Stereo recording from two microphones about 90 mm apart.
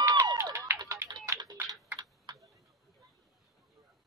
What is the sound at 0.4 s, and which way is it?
Music, 30° right (ahead or behind).